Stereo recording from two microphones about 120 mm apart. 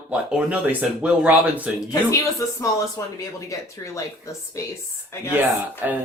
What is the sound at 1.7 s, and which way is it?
Speech, 30° left (ahead or behind).